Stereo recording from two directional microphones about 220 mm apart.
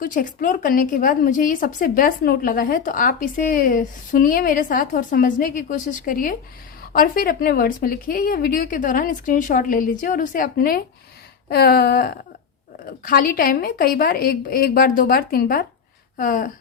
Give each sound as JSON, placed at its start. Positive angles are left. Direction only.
{"t": 0.0, "sound": "a woman's voice", "side_deg": 35}
{"t": 11.4, "sound": "a sound", "side_deg": 45}
{"t": 12.8, "sound": "a woman's voice", "side_deg": 40}